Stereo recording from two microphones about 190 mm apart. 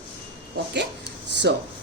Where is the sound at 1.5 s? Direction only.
65° right (ahead or behind).